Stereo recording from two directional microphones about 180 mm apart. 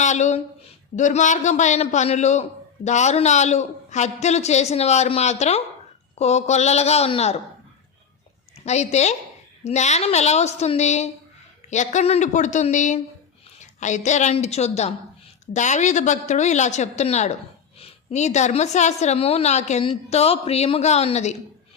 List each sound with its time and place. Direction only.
0.0 s a sound: 40° left (ahead or behind)
0.9 s a man's voice: 45° left (ahead or behind)
8.6 s a man's voice: 40° left (ahead or behind)